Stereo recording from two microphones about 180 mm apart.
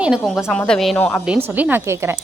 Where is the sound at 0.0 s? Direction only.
Centre (ahead or behind).